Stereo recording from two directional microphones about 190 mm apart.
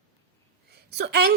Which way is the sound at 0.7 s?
60° right (ahead or behind).